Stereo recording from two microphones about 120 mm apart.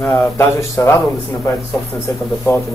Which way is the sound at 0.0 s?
15° left (ahead or behind).